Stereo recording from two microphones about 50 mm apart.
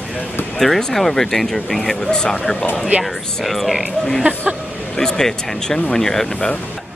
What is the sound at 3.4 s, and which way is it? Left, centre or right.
Speech, centre.